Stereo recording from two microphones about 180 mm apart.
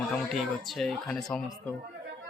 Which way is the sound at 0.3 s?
Centre (ahead or behind).